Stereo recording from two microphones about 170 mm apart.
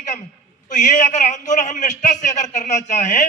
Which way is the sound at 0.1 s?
45° left (ahead or behind).